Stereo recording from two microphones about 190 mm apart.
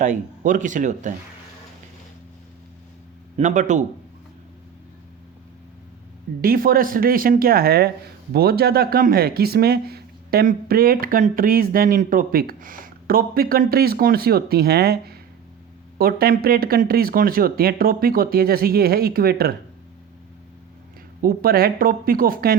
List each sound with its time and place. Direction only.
0.0 s speech: 40° right (ahead or behind)
3.3 s speech: 40° right (ahead or behind)
6.4 s speech: 50° right (ahead or behind)
21.2 s speech: 50° right (ahead or behind)